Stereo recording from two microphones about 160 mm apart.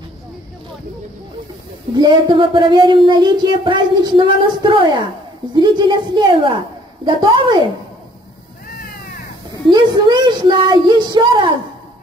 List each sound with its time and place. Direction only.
2.0 s speech: 30° right (ahead or behind)
8.7 s cat: 65° left (ahead or behind)
9.7 s speech: 25° right (ahead or behind)